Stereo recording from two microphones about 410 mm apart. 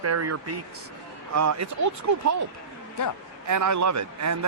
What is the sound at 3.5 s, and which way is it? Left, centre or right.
Speech, right.